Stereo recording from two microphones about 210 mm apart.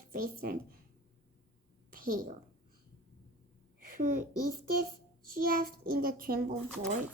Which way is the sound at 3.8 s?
40° right (ahead or behind).